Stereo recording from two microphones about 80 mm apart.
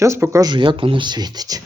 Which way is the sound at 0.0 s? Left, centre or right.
Right.